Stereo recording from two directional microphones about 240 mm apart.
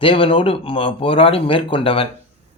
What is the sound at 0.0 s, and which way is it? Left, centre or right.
Speech, left.